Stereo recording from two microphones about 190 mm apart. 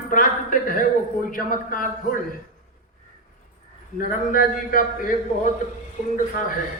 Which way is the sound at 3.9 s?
45° left (ahead or behind).